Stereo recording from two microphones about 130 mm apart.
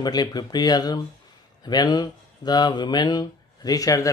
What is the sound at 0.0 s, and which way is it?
Speech, 30° left (ahead or behind).